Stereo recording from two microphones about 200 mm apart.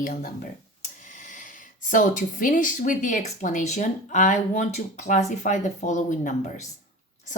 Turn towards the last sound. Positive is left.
turn(degrees=40)  # may be behind; listen again after turning